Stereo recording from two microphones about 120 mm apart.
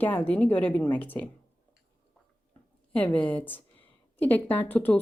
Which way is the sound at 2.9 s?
15° left (ahead or behind).